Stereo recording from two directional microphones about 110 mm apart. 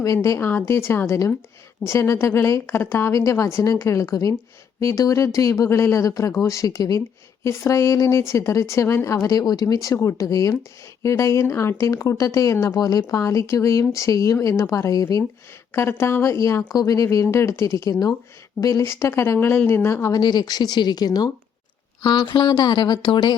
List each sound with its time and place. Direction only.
0.0 s a woman's voice: 30° left (ahead or behind); by 23.3 s 45° left (ahead or behind)